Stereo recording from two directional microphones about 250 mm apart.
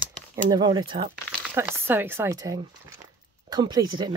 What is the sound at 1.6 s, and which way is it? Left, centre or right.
Speech, centre.